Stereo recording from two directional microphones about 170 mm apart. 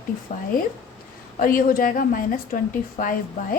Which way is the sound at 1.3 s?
55° left (ahead or behind).